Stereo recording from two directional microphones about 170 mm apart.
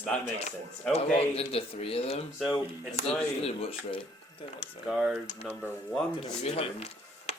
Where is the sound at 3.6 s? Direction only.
35° left (ahead or behind).